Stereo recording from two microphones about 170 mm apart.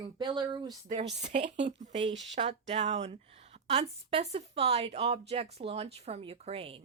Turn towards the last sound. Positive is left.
turn(degrees=-35)  # may be behind; listen again after turning